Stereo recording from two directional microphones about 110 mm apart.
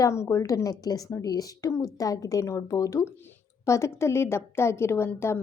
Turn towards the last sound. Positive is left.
turn(degrees=25)  # may be behind; listen again after turning